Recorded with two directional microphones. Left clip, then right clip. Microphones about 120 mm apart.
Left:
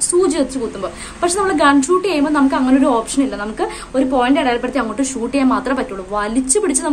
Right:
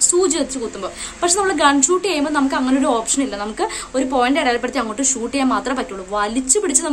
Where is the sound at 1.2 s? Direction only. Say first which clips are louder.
Left 2 dB; 20° right (ahead or behind).